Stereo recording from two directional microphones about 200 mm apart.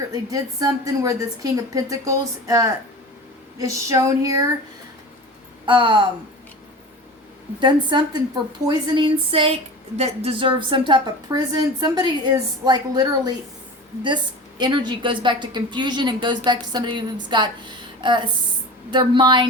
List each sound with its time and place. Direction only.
0.1 s a woman's voice: 20° right (ahead or behind)
5.6 s a woman's voice: 25° right (ahead or behind)
7.6 s a woman's voice: 25° right (ahead or behind)
14.6 s a woman's voice: 20° right (ahead or behind)